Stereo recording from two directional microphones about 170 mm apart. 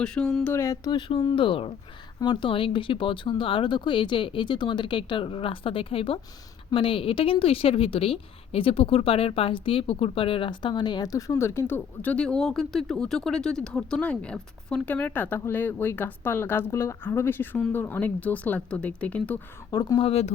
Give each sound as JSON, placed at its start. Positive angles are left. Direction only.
{"t": 0.0, "sound": "speech", "side_deg": 5}
{"t": 0.5, "sound": "a woman's voice", "side_deg": 20}
{"t": 19.7, "sound": "speech", "side_deg": 20}
{"t": 20.0, "sound": "speech", "side_deg": 35}